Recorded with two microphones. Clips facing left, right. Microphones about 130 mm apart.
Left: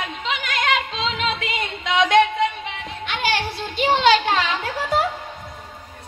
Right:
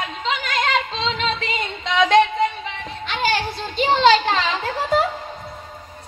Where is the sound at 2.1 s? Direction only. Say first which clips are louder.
Right 1 dB; 40° right (ahead or behind).